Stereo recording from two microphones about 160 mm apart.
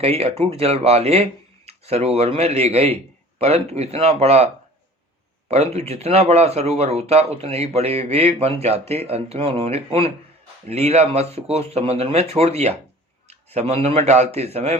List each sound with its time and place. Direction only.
0.0 s speech: 40° right (ahead or behind)
5.5 s a man's voice: 40° right (ahead or behind)